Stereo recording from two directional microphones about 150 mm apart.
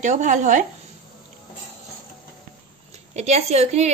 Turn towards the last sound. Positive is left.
turn(degrees=-45)  # may be behind; listen again after turning